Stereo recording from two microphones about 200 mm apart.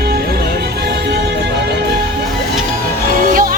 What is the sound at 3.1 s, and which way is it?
Music, 45° right (ahead or behind).